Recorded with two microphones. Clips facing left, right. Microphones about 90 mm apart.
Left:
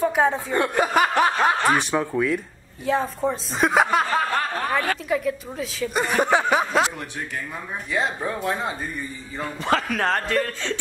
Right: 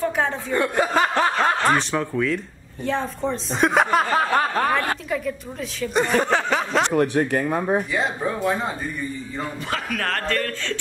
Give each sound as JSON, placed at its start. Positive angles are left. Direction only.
{"t": 0.0, "sound": "speech", "side_deg": 15}
{"t": 6.0, "sound": "speech", "side_deg": 15}
{"t": 6.9, "sound": "speech", "side_deg": -55}
{"t": 7.9, "sound": "speech", "side_deg": 0}
{"t": 9.9, "sound": "speech", "side_deg": 20}